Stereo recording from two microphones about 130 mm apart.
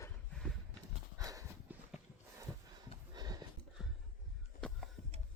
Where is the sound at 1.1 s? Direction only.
25° right (ahead or behind).